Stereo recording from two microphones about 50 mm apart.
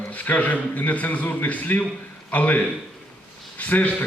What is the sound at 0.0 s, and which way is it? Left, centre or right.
A man's voice, left.